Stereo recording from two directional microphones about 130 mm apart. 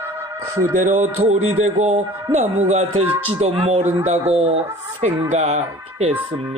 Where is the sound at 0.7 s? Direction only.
80° right.